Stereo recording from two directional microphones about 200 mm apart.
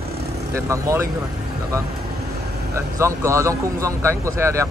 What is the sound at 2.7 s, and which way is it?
A man's voice, 15° right (ahead or behind).